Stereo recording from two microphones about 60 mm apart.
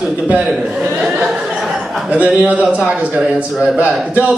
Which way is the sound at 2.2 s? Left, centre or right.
Right.